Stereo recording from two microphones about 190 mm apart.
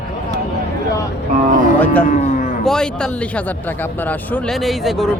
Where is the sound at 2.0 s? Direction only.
40° left (ahead or behind).